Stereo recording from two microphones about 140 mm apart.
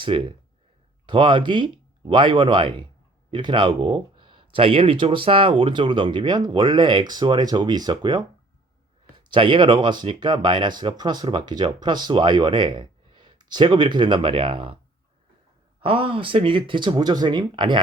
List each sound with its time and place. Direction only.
0.0 s speech: 35° right (ahead or behind)
15.8 s speech: 40° right (ahead or behind)